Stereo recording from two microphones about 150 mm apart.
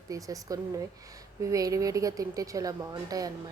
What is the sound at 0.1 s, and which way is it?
Speech, 25° right (ahead or behind).